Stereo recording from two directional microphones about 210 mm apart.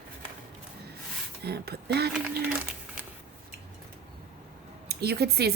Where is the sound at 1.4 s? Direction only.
50° right (ahead or behind).